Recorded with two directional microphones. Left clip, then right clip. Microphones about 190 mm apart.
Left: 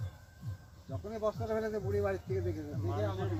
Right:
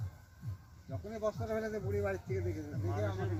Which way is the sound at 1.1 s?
25° right (ahead or behind).